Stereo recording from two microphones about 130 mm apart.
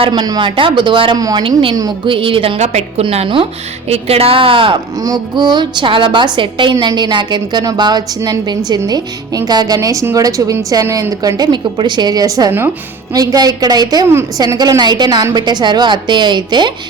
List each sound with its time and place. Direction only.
0.1 s a woman's voice: 30° right (ahead or behind)
2.6 s a woman's voice: 55° right (ahead or behind)
5.0 s a woman's voice: 30° right (ahead or behind)
12.5 s speech: 15° right (ahead or behind)
13.1 s a woman's voice: 30° right (ahead or behind)